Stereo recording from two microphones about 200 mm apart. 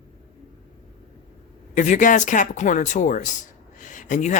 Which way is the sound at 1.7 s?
40° left (ahead or behind).